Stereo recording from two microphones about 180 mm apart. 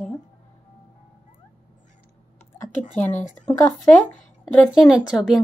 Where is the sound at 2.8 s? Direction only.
45° left (ahead or behind).